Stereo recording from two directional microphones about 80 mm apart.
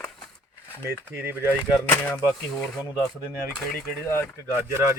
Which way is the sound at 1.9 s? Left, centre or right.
Left.